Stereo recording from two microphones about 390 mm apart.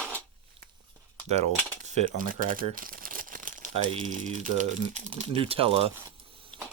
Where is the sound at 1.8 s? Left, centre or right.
Centre.